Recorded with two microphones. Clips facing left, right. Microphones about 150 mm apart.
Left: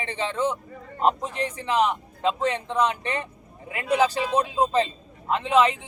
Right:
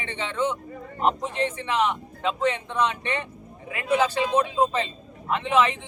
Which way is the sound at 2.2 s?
35° left (ahead or behind).